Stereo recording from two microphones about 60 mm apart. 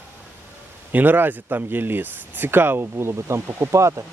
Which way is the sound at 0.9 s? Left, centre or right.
Right.